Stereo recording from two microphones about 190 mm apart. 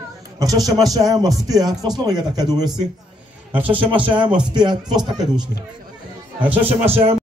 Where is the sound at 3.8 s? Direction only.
25° right (ahead or behind).